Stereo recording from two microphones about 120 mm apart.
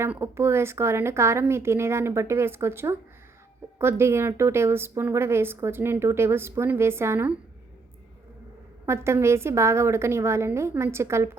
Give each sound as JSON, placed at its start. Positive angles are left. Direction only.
{"t": 0.0, "sound": "a woman's voice", "side_deg": -20}
{"t": 8.9, "sound": "a woman's voice", "side_deg": -20}